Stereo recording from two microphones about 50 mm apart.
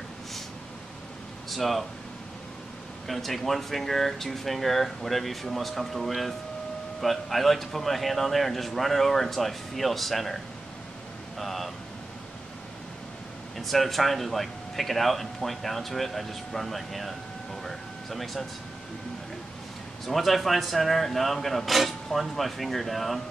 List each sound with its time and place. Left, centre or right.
1.5 s speech: centre
3.1 s speech: centre
13.6 s speech: centre
17.6 s air conditioning: centre
20.1 s speech: centre